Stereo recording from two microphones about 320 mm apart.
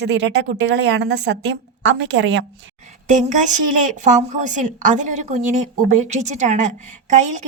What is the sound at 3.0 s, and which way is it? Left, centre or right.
A woman's voice, right.